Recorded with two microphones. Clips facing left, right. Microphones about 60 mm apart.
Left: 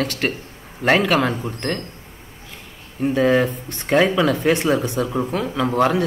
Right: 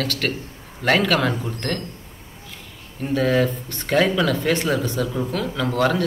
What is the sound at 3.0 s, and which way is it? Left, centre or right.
Speech, left.